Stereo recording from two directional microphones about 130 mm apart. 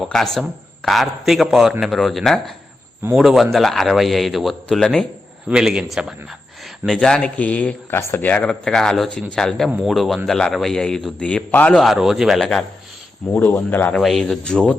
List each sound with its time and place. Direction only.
0.0 s a man's voice: 5° left (ahead or behind)
14.0 s a man's voice: centre (ahead or behind)